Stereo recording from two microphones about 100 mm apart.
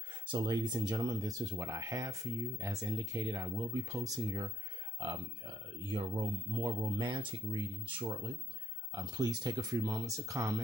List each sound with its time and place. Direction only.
0.3 s speech: 45° right (ahead or behind)
5.0 s speech: 55° right (ahead or behind); by 10.6 s 35° right (ahead or behind)